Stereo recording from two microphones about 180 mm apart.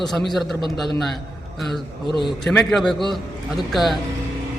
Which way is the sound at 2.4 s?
5° left (ahead or behind).